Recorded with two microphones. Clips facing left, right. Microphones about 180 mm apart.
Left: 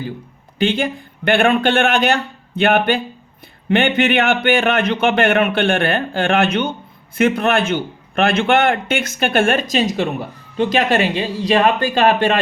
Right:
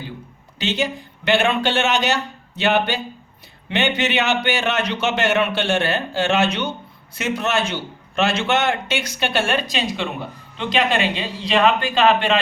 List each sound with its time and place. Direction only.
0.6 s a man's voice: 55° left (ahead or behind)